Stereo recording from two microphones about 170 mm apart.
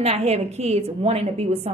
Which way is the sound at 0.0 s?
40° right (ahead or behind).